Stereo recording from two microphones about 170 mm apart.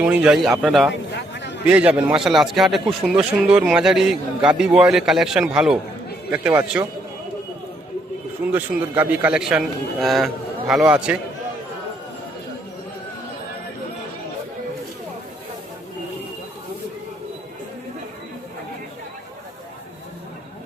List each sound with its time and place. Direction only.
0.0 s a man's voice: 5° right (ahead or behind)
1.1 s a sound: 90° left
1.6 s a man's voice: 5° right (ahead or behind)
8.5 s a man's voice: 10° right (ahead or behind)